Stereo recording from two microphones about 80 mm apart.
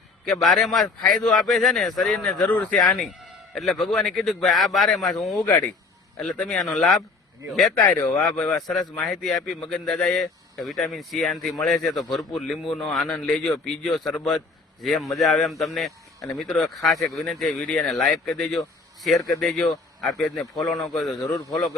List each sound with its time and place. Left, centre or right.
0.4 s a man's voice: centre
5.5 s a man's voice: centre
21.2 s a man's voice: left